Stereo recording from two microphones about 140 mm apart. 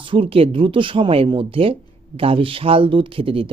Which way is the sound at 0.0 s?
40° right (ahead or behind).